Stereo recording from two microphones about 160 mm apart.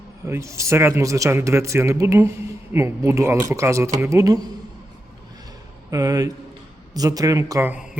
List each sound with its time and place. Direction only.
0.3 s speech: 20° right (ahead or behind)
5.9 s speech: 20° right (ahead or behind)